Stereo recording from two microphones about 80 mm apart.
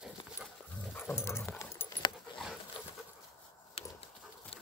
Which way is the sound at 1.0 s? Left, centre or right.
Left.